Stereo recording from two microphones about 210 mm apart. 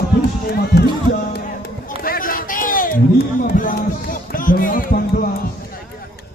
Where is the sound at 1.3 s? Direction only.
45° left (ahead or behind).